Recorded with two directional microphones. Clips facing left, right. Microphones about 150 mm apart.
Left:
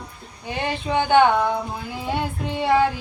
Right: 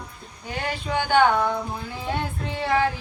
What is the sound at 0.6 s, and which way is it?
Speech, 20° left (ahead or behind).